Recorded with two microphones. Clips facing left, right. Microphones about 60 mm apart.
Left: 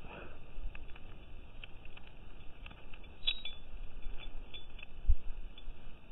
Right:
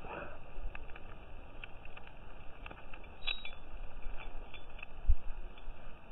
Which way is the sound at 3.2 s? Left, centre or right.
Right.